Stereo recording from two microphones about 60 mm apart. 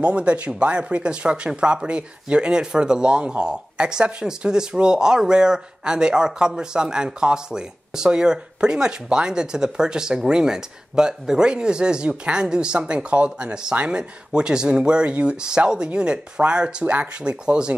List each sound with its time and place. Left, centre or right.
0.0 s speech: centre